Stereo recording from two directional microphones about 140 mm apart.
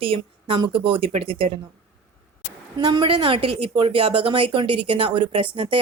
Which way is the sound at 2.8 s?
35° right (ahead or behind).